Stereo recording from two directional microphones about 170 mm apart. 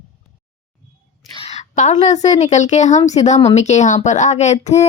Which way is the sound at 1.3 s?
40° left (ahead or behind).